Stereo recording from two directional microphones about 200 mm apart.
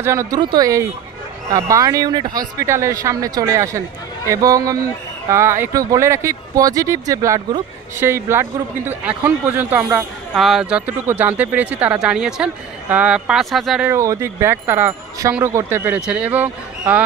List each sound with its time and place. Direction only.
0.0 s speech: 15° right (ahead or behind)
13.9 s speech: 15° right (ahead or behind)